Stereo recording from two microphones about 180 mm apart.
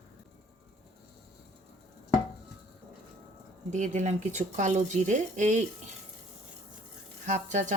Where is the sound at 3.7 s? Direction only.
40° right (ahead or behind).